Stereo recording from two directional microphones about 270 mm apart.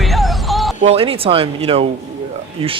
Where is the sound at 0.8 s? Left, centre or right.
Right.